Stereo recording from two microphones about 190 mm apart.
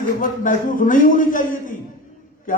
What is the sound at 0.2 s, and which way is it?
A man's voice, 45° left (ahead or behind).